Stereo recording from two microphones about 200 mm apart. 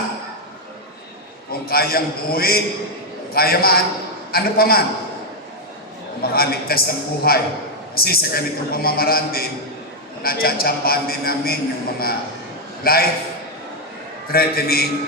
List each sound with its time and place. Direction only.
1.6 s a man's voice: 50° left (ahead or behind)
6.3 s a man's voice: 50° left (ahead or behind)
14.3 s a man's voice: 50° left (ahead or behind)